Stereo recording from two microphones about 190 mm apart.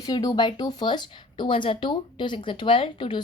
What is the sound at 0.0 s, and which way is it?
Speech, 20° left (ahead or behind).